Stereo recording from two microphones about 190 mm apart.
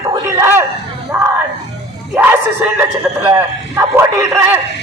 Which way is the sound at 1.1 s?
15° right (ahead or behind).